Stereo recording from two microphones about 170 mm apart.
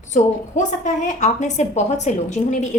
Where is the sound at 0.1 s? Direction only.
45° left (ahead or behind).